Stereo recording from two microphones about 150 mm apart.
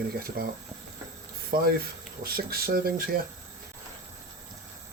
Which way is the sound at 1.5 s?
90° right.